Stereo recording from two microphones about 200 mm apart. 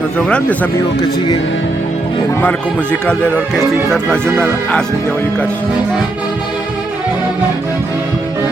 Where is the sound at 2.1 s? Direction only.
10° left (ahead or behind).